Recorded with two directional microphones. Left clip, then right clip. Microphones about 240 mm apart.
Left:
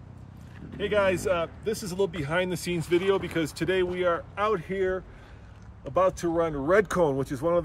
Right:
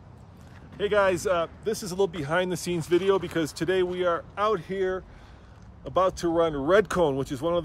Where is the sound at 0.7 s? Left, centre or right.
Centre.